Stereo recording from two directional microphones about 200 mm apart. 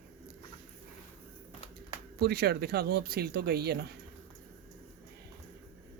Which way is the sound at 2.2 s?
55° right (ahead or behind).